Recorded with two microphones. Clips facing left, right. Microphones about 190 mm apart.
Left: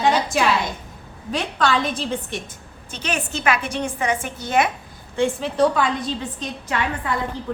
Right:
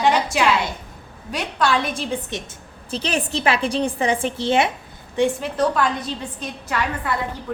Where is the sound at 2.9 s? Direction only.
35° right (ahead or behind).